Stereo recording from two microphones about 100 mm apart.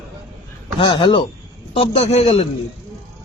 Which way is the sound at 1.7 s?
75° left (ahead or behind).